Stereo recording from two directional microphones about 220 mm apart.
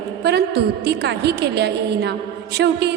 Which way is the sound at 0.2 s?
50° right (ahead or behind).